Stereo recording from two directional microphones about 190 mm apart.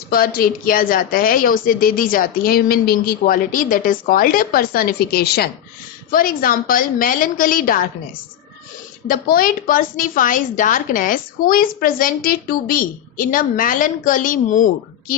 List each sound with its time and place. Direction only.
0.1 s a woman's voice: 50° left (ahead or behind)
9.0 s a woman's voice: 50° left (ahead or behind)